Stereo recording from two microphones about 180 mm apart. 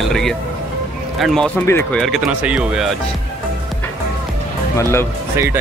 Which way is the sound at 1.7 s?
15° left (ahead or behind).